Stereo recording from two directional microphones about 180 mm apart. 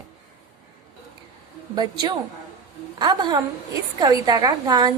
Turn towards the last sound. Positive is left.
turn(degrees=-20)  # may be behind; listen again after turning